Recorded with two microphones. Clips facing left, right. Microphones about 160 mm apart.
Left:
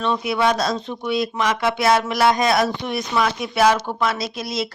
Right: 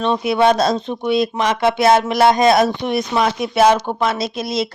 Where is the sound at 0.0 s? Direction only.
25° right (ahead or behind).